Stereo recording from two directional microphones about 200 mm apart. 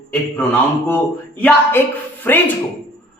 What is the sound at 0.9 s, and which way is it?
Speech, 10° left (ahead or behind).